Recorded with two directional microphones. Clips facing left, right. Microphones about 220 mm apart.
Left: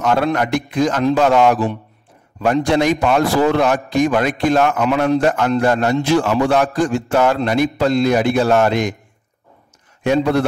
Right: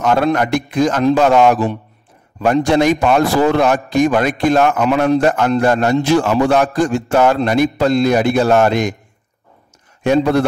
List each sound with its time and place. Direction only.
0.0 s a man's voice: 45° right (ahead or behind)
10.0 s a man's voice: 40° right (ahead or behind)